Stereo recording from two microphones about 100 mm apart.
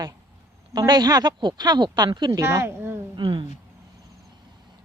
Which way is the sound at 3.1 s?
55° right (ahead or behind).